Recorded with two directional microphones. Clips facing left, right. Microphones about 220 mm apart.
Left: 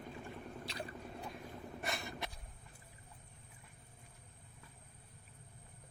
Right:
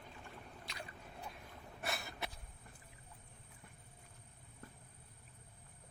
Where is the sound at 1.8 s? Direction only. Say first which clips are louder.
Even; 5° right (ahead or behind).